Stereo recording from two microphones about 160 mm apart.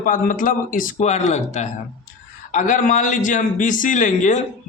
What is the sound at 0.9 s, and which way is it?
Speech, 45° left (ahead or behind).